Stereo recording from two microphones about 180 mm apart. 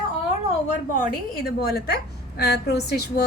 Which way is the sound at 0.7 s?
50° left (ahead or behind).